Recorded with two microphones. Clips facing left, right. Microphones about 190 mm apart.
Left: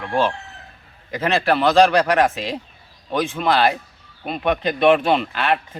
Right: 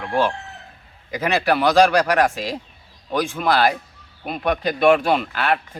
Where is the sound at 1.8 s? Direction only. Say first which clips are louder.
Left 1 dB; centre (ahead or behind).